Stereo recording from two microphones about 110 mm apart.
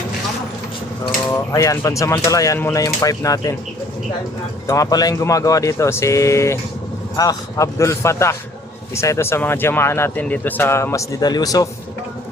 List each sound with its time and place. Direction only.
1.5 s speech: 30° left (ahead or behind)
4.6 s speech: 30° left (ahead or behind)